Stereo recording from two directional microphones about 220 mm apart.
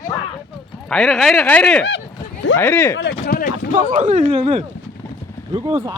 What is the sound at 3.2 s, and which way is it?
Speech, 40° left (ahead or behind).